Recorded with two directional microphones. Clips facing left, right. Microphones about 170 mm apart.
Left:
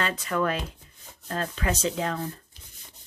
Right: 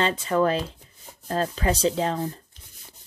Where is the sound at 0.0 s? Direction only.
25° right (ahead or behind).